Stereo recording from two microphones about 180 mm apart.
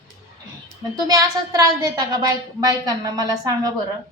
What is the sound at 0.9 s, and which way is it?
A woman's voice, 20° right (ahead or behind).